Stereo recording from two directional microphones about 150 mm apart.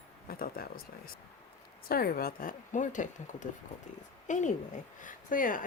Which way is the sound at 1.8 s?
85° left.